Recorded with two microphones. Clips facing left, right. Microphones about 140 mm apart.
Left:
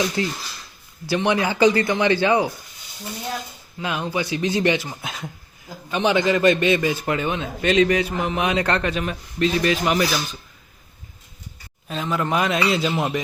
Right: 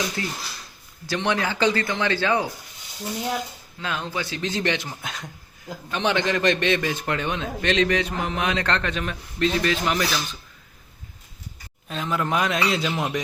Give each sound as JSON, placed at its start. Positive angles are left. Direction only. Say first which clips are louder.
{"t": 0.2, "sound": "speech", "louder": "left 6 dB", "side_deg": 25}
{"t": 1.0, "sound": "a man's voice", "louder": "left 4 dB", "side_deg": 10}
{"t": 3.8, "sound": "a man's voice", "louder": "left 4 dB", "side_deg": 15}
{"t": 11.9, "sound": "a man's voice", "louder": "left 2 dB", "side_deg": 0}